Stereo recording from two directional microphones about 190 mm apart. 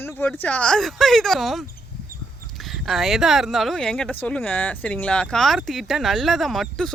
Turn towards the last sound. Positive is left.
turn(degrees=0)  # may be behind; listen again after turning